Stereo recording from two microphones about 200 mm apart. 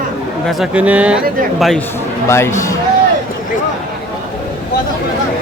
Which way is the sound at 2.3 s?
15° left (ahead or behind).